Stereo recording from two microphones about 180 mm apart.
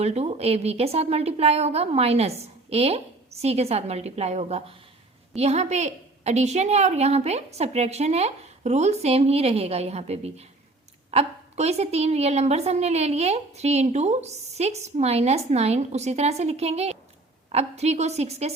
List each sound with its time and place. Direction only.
0.0 s a woman's voice: 35° right (ahead or behind)